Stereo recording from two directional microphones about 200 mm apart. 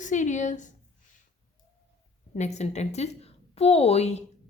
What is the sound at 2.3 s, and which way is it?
A woman's voice, 35° left (ahead or behind).